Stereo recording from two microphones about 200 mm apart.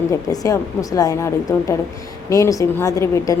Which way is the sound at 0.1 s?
15° left (ahead or behind).